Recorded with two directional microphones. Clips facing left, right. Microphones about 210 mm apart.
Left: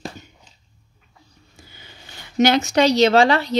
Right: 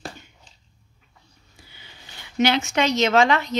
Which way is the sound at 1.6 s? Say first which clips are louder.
Left 4 dB; 45° left (ahead or behind).